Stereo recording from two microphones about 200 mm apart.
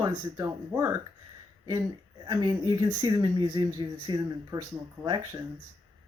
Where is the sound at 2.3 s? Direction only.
20° right (ahead or behind).